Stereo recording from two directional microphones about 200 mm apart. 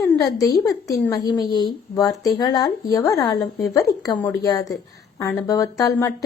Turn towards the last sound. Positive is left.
turn(degrees=15)  # may be behind; listen again after turning